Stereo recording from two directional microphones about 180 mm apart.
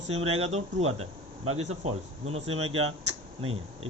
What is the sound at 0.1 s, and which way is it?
Speech, 35° right (ahead or behind).